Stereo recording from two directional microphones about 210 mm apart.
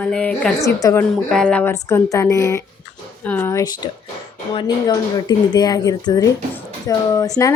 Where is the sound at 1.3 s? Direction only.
5° left (ahead or behind).